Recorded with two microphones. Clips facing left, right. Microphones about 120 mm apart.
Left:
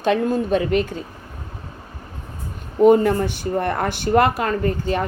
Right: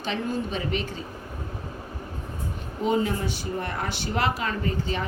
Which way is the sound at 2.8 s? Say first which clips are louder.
Left 11 dB; 55° left (ahead or behind).